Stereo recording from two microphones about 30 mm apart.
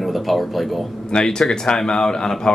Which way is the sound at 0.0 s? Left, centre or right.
Centre.